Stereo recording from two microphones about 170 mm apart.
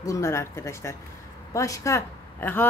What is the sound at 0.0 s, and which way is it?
A woman's voice, 20° left (ahead or behind).